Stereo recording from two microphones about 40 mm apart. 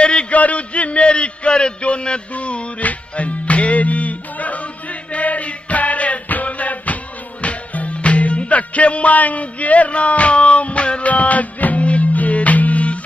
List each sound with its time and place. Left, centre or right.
0.0 s a sound: left
0.3 s a man's voice: left
5.1 s music: left